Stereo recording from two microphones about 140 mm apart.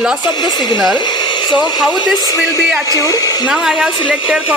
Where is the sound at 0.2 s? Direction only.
30° left (ahead or behind).